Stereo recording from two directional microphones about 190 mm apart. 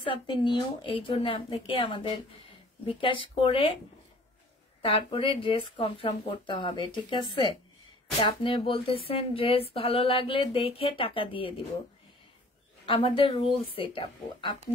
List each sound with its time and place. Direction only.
0.1 s speech: 25° left (ahead or behind)
4.9 s speech: 25° left (ahead or behind)
12.8 s speech: 25° left (ahead or behind)